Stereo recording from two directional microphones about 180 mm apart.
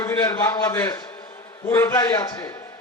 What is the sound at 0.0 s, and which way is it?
A man's voice, 20° left (ahead or behind).